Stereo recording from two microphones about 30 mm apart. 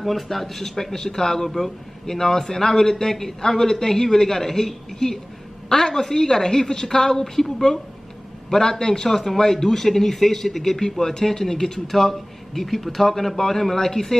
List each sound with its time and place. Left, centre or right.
0.0 s a man's voice: centre
10.8 s a man's voice: left